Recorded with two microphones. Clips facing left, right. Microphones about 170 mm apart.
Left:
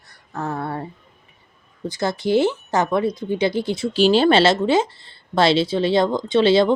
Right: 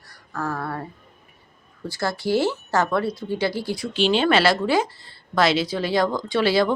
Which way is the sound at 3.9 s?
40° left (ahead or behind).